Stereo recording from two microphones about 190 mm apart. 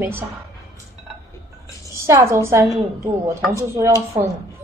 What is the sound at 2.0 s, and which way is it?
A woman's voice, 15° right (ahead or behind).